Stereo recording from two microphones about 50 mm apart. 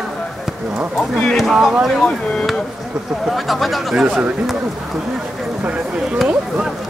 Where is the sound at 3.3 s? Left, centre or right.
Centre.